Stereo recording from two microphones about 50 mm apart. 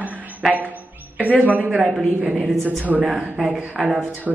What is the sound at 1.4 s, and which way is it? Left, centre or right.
Speech, right.